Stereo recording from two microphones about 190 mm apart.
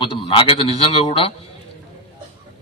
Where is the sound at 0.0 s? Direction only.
25° left (ahead or behind).